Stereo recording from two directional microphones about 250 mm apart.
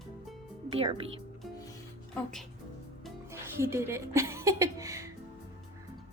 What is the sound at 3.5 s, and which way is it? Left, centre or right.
A woman's voice, centre.